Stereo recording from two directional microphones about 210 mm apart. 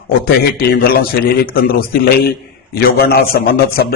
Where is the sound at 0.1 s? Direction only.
50° left (ahead or behind).